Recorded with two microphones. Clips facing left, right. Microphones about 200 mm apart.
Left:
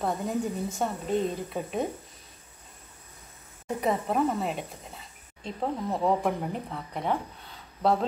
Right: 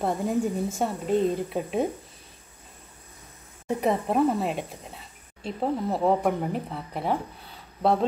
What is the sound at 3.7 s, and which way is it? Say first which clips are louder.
Speech: right 3 dB; 5° right (ahead or behind).